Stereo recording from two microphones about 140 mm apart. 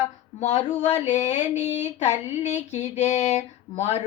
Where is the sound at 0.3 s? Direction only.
55° left (ahead or behind).